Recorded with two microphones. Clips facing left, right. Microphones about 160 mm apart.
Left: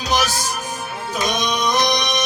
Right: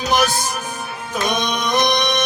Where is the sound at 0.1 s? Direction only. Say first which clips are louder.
Right 2 dB; 55° right (ahead or behind).